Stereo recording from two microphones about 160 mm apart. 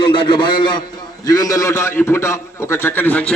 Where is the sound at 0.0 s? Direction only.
30° left (ahead or behind).